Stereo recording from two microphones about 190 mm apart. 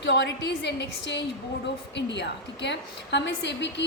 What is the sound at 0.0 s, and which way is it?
A woman's voice, 70° left (ahead or behind).